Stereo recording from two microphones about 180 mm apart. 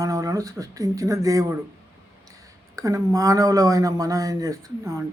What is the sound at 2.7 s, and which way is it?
Speech, 20° right (ahead or behind).